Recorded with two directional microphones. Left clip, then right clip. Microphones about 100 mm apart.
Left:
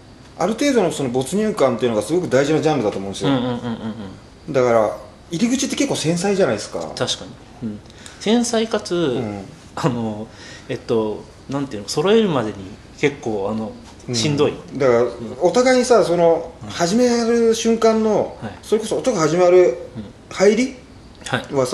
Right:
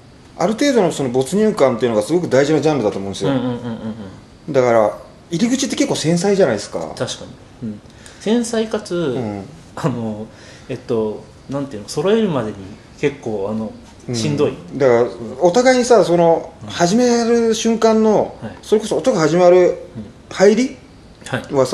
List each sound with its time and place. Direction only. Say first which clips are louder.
0.4 s speech: right 2 dB; 10° right (ahead or behind)
3.3 s speech: even; 15° left (ahead or behind)
4.5 s speech: right 2 dB; 10° right (ahead or behind)
6.8 s speech: left 1 dB; 15° left (ahead or behind)
14.8 s speech: right 2 dB; 15° right (ahead or behind)
21.2 s speech: left 1 dB; 15° left (ahead or behind)
21.5 s speech: right 5 dB; 15° right (ahead or behind)